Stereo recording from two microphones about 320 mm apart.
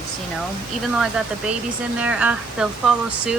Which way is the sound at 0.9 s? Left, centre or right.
Centre.